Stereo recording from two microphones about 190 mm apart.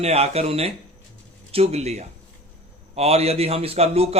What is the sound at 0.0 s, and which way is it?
A man's voice, 30° right (ahead or behind).